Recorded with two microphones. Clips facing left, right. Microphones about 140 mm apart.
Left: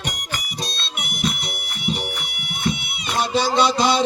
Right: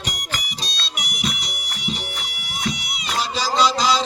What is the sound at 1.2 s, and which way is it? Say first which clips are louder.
Music: left 4 dB; 55° left (ahead or behind).